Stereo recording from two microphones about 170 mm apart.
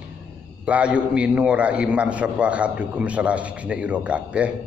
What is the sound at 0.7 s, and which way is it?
A man's voice, 5° right (ahead or behind).